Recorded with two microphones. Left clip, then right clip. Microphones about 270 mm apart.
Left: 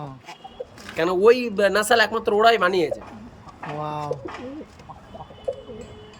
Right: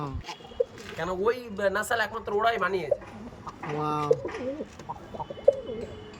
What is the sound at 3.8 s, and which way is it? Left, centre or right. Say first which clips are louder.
Speech: even; centre.